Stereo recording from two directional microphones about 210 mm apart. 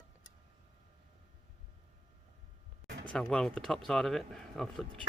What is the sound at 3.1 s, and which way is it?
Speech, 5° left (ahead or behind).